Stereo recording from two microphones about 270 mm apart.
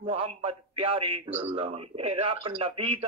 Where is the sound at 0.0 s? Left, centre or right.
Centre.